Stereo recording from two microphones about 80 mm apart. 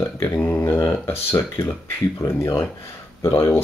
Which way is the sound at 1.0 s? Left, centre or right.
Left.